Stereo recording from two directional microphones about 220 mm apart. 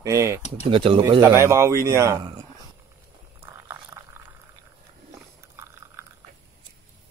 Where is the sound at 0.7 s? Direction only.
25° right (ahead or behind).